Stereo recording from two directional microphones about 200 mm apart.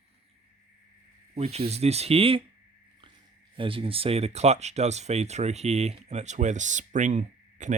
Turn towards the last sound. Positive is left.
turn(degrees=-35)  # may be behind; listen again after turning